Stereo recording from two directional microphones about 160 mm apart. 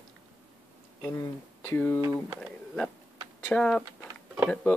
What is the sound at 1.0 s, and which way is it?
Speech, 15° left (ahead or behind).